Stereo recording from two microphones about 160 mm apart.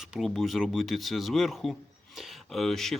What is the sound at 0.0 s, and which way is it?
Speech, centre (ahead or behind).